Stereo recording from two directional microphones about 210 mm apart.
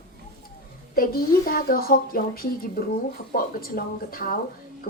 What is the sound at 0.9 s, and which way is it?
A woman's voice, 45° left (ahead or behind).